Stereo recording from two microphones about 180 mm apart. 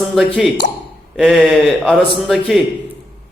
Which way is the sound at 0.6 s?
45° left (ahead or behind).